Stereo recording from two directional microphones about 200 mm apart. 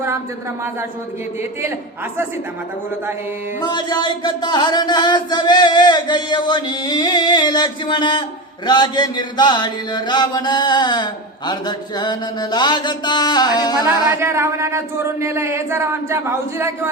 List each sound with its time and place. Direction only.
3.6 s chant: 20° left (ahead or behind)
14.2 s speech: 15° right (ahead or behind)